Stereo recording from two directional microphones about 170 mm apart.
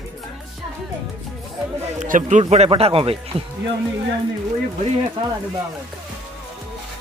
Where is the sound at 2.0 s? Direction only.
45° right (ahead or behind).